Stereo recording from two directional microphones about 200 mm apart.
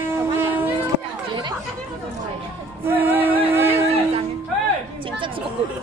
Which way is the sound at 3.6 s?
30° right (ahead or behind).